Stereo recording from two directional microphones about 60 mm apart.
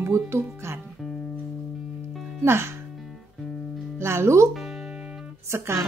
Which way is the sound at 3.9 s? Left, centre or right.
Right.